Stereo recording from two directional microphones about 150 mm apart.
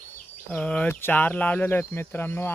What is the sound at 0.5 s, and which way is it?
Speech, 10° left (ahead or behind).